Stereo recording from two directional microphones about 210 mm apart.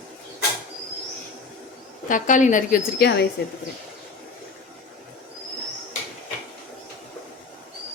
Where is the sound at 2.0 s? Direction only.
40° left (ahead or behind).